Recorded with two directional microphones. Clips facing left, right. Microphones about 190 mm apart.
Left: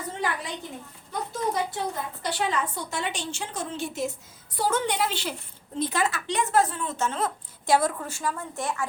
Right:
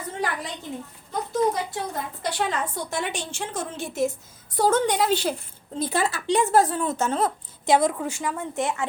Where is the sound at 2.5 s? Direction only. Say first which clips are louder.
Right 1 dB; 50° right (ahead or behind).